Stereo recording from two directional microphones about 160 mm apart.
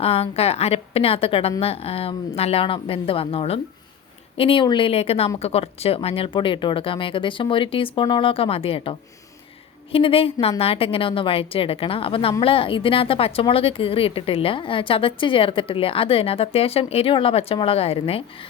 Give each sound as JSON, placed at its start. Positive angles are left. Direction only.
{"t": 0.0, "sound": "a woman's voice", "side_deg": 40}